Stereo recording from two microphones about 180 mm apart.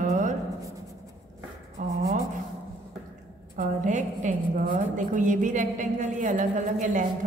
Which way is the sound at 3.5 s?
45° right (ahead or behind).